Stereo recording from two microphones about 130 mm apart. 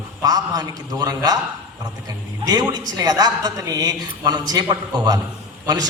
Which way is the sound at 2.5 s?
30° right (ahead or behind).